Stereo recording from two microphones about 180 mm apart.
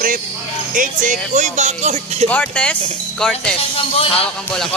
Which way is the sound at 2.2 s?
10° left (ahead or behind).